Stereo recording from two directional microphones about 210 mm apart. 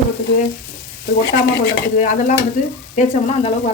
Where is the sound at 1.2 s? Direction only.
55° left (ahead or behind).